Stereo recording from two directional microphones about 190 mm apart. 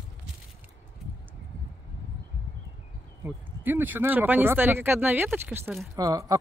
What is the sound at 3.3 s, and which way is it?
Speech, 10° right (ahead or behind).